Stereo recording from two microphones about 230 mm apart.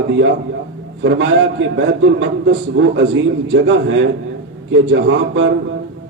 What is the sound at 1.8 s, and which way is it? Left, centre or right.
A man's voice, right.